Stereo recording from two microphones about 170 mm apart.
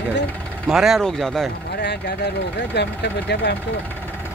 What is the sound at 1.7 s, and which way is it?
Speech, 80° left.